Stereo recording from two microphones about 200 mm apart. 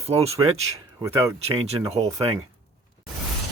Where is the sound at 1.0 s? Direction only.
15° right (ahead or behind).